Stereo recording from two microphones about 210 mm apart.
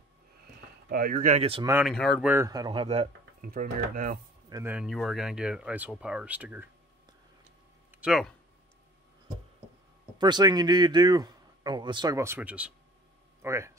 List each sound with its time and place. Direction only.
0.8 s speech: 45° right (ahead or behind); by 1.7 s 25° right (ahead or behind)
1.7 s speech: 10° right (ahead or behind)
2.3 s speech: 15° right (ahead or behind)
3.3 s speech: 45° right (ahead or behind)
4.5 s speech: 15° right (ahead or behind)
4.7 s speech: centre (ahead or behind)
7.9 s speech: 5° right (ahead or behind)
10.1 s speech: 20° right (ahead or behind)